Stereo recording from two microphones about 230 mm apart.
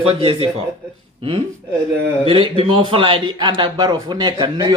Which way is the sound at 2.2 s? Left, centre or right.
Right.